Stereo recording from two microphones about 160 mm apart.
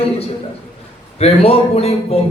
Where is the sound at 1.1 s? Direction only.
40° left (ahead or behind).